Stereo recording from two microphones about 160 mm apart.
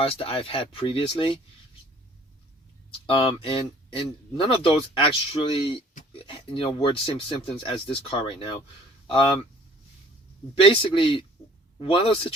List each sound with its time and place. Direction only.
0.0 s speech: 35° left (ahead or behind)
3.1 s speech: 35° left (ahead or behind)
10.6 s speech: 30° left (ahead or behind)